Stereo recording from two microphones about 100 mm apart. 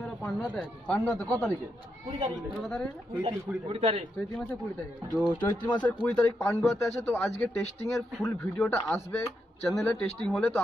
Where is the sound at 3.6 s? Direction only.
85° right.